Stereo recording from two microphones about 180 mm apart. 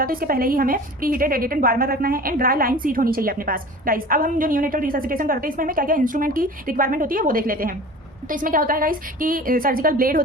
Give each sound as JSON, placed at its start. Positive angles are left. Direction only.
{"t": 0.0, "sound": "a woman's voice", "side_deg": -55}